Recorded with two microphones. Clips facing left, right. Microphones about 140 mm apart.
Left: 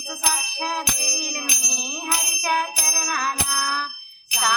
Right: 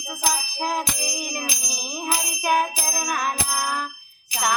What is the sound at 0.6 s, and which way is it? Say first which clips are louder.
Bell: right 2 dB; 10° right (ahead or behind).